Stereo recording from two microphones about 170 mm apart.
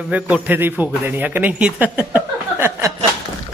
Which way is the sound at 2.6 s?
15° right (ahead or behind).